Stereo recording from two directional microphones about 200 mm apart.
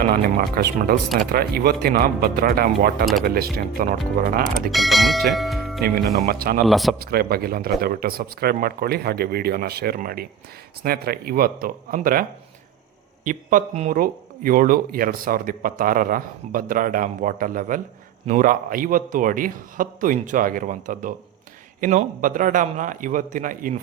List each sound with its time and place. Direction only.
0.1 s speech: 50° right (ahead or behind)
4.7 s speech: centre (ahead or behind)
5.3 s music: centre (ahead or behind)
6.1 s speech: 50° right (ahead or behind)
6.7 s speech: centre (ahead or behind)
7.0 s speech: 50° right (ahead or behind)
13.2 s a man's voice: 40° right (ahead or behind)